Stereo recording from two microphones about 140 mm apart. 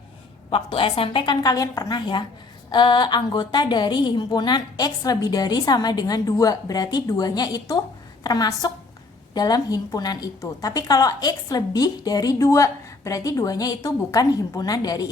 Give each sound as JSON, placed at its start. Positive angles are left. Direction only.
{"t": 0.5, "sound": "a woman's voice", "side_deg": 40}